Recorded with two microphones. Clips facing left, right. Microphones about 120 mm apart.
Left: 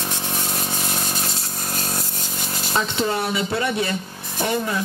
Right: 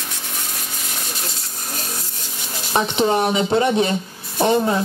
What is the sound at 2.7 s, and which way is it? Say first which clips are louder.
Speech: right 5 dB; 20° right (ahead or behind).